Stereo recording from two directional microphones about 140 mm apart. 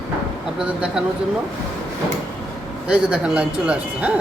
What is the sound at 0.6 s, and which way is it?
Speech, 5° right (ahead or behind).